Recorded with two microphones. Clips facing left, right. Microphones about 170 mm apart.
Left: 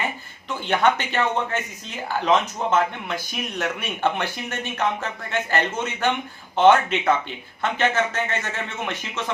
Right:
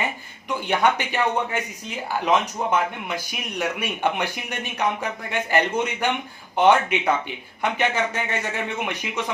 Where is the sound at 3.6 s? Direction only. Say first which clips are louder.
Right 1 dB; 15° right (ahead or behind).